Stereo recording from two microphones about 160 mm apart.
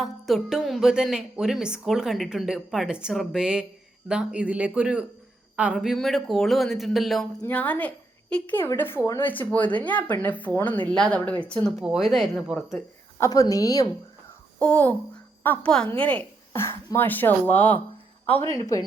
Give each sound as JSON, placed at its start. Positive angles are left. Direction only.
{"t": 0.0, "sound": "a woman's voice", "side_deg": 0}
{"t": 7.4, "sound": "a woman's voice", "side_deg": 10}
{"t": 13.1, "sound": "speech", "side_deg": 20}
{"t": 14.6, "sound": "a woman's voice", "side_deg": 10}